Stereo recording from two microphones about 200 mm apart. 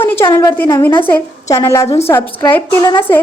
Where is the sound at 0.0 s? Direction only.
10° left (ahead or behind).